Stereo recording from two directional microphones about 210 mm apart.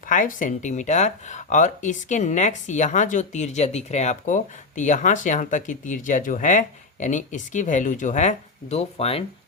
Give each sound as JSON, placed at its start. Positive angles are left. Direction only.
{"t": 0.0, "sound": "speech", "side_deg": 40}